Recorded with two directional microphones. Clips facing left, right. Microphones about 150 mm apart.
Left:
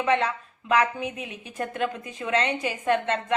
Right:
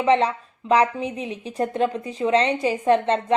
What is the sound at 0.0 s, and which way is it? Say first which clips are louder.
A woman's voice: right 5 dB; 30° right (ahead or behind).